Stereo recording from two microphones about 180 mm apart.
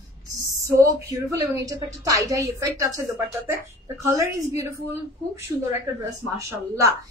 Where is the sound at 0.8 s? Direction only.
15° right (ahead or behind).